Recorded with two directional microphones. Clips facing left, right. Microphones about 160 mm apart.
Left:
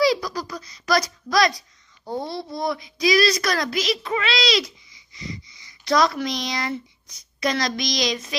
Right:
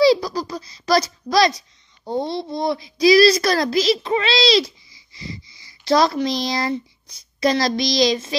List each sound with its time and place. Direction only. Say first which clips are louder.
0.0 s a child's voice: right 5 dB; 30° right (ahead or behind)